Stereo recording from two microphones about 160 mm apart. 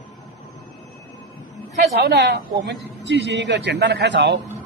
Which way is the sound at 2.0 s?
80° right.